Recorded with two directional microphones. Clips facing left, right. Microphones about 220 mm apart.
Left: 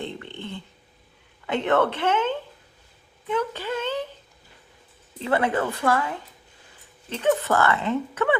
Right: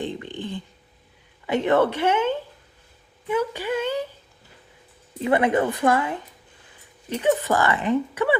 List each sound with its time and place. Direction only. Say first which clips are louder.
0.0 s a sound: right 4 dB; 15° right (ahead or behind)
1.5 s speech: right 2 dB; 10° right (ahead or behind)
5.2 s speech: right 3 dB; 20° right (ahead or behind)